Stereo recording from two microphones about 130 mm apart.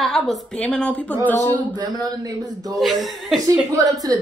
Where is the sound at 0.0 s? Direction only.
Centre (ahead or behind).